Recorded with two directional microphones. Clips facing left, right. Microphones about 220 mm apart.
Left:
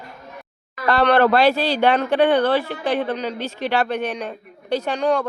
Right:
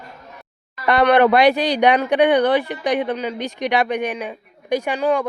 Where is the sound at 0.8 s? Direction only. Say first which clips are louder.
Right 2 dB; 15° right (ahead or behind).